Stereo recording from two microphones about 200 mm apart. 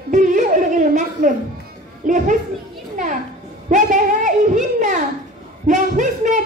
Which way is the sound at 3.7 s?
40° right (ahead or behind).